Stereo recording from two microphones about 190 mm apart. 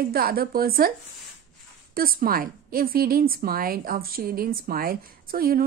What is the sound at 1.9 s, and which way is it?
A woman's voice, 50° right (ahead or behind).